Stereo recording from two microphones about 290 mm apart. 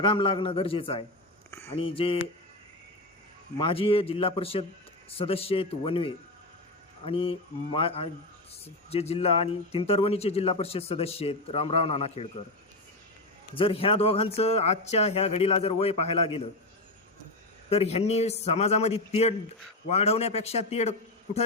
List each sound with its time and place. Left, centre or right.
0.0 s a man's voice: centre
1.5 s a sound: centre
1.7 s speech: centre
3.6 s speech: centre
13.5 s speech: centre
17.7 s speech: left